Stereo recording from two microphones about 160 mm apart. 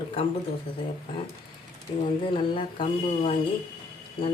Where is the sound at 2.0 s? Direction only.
35° left (ahead or behind).